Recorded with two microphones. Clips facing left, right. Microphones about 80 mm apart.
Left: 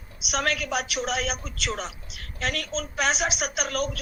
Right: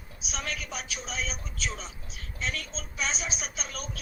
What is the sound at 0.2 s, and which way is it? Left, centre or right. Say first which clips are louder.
A woman's voice: left 10 dB; left.